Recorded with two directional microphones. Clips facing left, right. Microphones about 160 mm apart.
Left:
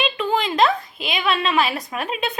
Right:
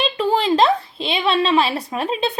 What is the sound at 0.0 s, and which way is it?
A woman's voice, 35° right (ahead or behind).